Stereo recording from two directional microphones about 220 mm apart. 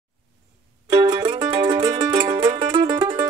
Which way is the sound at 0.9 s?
20° right (ahead or behind).